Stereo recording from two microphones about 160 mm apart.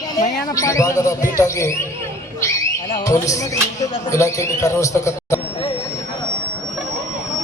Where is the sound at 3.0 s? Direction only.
20° left (ahead or behind).